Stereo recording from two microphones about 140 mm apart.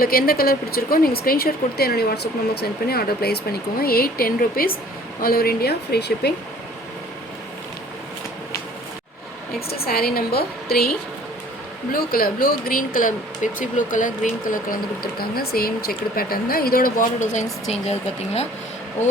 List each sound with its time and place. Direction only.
0.0 s speech: 90° left
9.6 s speech: 90° left; by 18.4 s 50° left (ahead or behind)